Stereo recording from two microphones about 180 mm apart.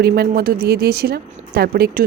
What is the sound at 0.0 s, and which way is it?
Speech, 60° right (ahead or behind).